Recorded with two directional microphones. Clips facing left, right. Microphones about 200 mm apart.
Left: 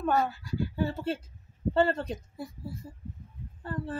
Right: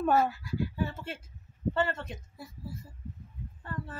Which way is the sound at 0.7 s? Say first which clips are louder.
Left 5 dB; 30° left (ahead or behind).